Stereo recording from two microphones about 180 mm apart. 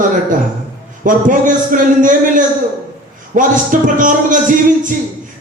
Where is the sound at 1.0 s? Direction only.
45° right (ahead or behind).